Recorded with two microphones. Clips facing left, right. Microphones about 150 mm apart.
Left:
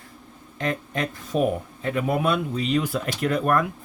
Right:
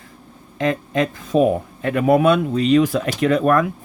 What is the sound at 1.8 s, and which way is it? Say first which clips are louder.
Speech: right 8 dB; 75° right (ahead or behind).